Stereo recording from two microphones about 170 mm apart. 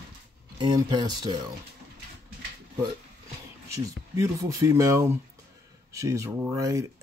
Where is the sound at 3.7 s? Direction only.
20° right (ahead or behind).